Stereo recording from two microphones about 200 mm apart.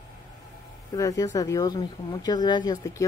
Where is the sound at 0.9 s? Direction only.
15° left (ahead or behind).